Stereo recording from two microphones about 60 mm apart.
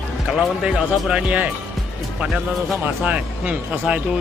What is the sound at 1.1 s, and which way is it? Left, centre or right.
Speech, right.